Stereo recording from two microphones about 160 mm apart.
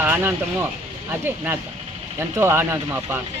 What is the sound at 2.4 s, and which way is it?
Speech, 15° right (ahead or behind).